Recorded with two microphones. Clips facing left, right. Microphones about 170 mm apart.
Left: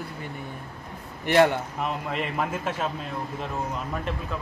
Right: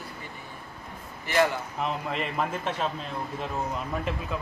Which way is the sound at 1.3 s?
60° left (ahead or behind).